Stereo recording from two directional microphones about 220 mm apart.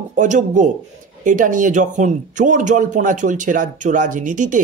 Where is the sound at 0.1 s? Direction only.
35° right (ahead or behind).